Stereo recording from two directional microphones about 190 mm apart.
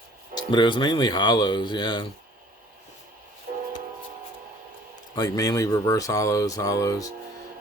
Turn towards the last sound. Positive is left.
turn(degrees=20)  # may be behind; listen again after turning